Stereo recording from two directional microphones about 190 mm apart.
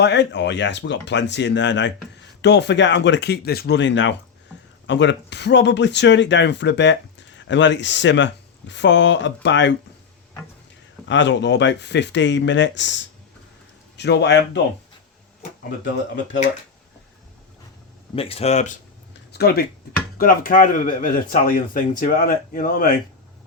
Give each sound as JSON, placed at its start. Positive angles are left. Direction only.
{"t": 0.0, "sound": "speech", "side_deg": 65}
{"t": 11.1, "sound": "speech", "side_deg": 70}
{"t": 15.8, "sound": "speech", "side_deg": 45}
{"t": 18.1, "sound": "speech", "side_deg": 30}
{"t": 19.3, "sound": "speech", "side_deg": 55}